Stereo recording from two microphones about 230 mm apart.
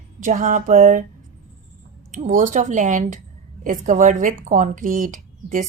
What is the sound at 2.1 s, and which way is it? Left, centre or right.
Speech, right.